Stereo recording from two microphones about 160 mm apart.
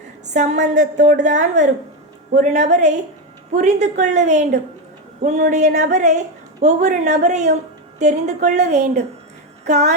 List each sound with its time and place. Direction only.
0.3 s a woman's voice: 45° right (ahead or behind)